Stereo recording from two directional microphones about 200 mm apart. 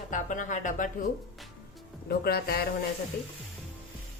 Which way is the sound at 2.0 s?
50° left (ahead or behind).